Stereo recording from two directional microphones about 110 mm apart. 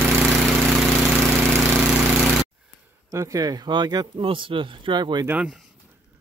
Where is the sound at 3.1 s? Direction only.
30° right (ahead or behind).